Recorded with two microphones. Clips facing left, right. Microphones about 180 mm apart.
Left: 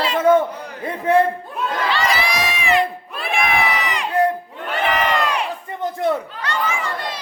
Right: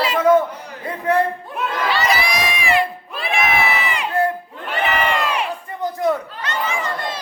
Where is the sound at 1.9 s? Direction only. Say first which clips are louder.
Right 1 dB; 10° right (ahead or behind).